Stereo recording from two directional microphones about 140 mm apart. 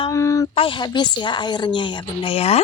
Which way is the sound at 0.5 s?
40° left (ahead or behind).